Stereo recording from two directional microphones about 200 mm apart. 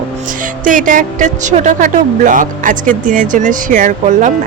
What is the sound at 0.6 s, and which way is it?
Speech, 40° right (ahead or behind).